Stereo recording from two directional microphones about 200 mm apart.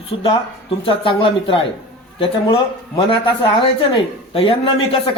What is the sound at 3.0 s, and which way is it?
A man's voice, 25° left (ahead or behind).